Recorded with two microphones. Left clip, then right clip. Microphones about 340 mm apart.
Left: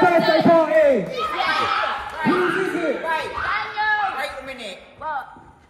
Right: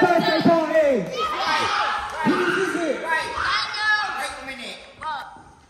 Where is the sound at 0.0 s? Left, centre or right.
Centre.